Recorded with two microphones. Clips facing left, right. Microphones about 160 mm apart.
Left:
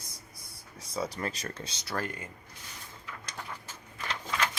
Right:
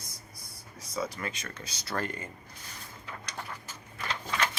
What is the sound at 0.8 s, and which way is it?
Speech, 30° left (ahead or behind).